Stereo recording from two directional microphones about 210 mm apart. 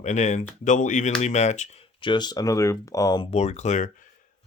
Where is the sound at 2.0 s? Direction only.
20° left (ahead or behind).